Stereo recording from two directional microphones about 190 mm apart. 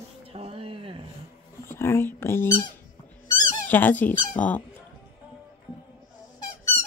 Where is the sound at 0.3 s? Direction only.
30° right (ahead or behind).